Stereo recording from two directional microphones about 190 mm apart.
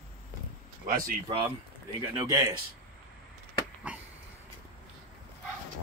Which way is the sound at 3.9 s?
5° right (ahead or behind).